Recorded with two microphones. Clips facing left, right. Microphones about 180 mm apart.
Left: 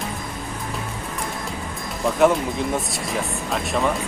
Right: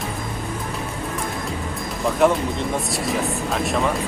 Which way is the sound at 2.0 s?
Centre (ahead or behind).